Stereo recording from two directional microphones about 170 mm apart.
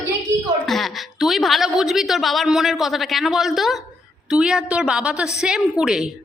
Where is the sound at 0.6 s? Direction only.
Centre (ahead or behind).